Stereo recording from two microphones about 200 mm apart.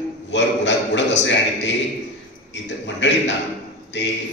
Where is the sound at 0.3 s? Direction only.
65° left (ahead or behind).